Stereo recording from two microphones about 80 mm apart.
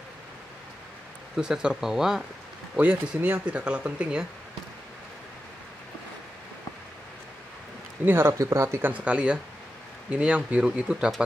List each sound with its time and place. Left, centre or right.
1.3 s speech: centre
8.0 s speech: right
8.3 s speech: right
8.8 s speech: centre